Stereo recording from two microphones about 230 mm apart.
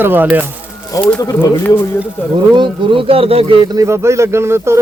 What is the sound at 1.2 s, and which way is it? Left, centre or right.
Speech, centre.